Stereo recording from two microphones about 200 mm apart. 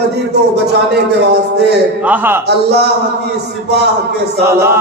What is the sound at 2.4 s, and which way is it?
A man's voice, 55° right (ahead or behind).